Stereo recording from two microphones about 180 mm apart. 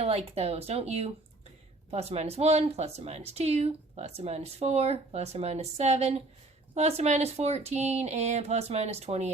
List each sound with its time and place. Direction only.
0.0 s speech: 35° right (ahead or behind)